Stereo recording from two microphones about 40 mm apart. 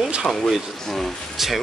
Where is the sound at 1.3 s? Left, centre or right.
Centre.